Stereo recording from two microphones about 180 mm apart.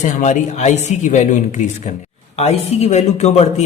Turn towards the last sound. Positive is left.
turn(degrees=35)  # may be behind; listen again after turning